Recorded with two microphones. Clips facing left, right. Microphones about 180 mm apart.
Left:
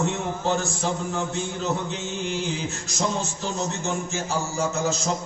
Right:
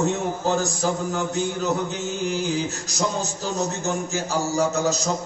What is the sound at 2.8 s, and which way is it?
A man's voice, 35° right (ahead or behind).